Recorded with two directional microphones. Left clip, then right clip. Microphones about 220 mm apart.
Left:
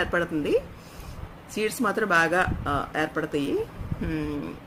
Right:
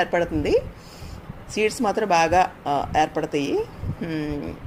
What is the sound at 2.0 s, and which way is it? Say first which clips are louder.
Speech: right 4 dB; 45° left (ahead or behind).